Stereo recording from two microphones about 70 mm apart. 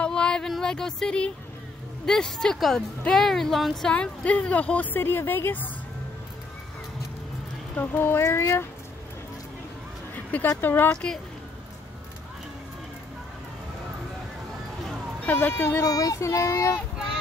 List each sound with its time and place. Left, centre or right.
0.0 s a sound: centre
0.5 s a woman's voice: centre
3.9 s speech: centre
7.7 s speech: left
10.1 s a sound: left
10.6 s speech: left
15.2 s speech: left
15.8 s speech: left